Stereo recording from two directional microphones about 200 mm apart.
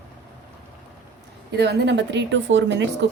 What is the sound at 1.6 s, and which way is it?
A woman's voice, 55° right (ahead or behind).